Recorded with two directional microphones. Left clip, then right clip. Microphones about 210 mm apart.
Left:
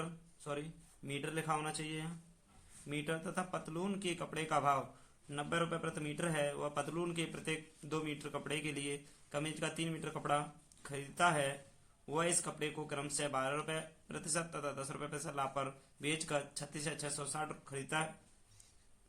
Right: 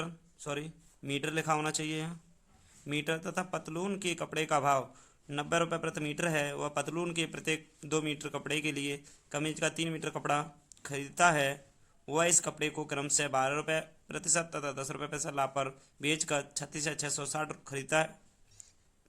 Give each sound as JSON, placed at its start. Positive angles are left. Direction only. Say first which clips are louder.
{"t": 0.0, "sound": "speech", "louder": "right 5 dB", "side_deg": -40}